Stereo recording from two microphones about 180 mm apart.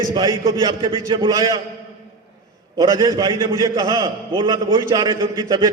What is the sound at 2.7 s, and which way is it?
A man's voice, 20° right (ahead or behind).